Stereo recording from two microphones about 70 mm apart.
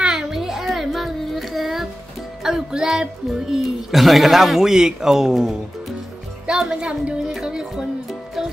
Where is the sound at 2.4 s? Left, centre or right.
Centre.